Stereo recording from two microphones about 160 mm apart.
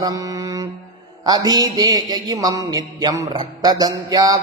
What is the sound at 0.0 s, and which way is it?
Mantra, 25° right (ahead or behind).